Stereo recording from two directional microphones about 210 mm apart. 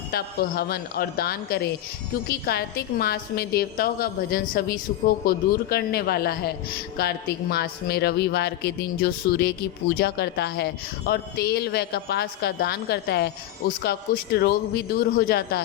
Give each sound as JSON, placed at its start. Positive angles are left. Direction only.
{"t": 0.1, "sound": "a man's voice", "side_deg": 45}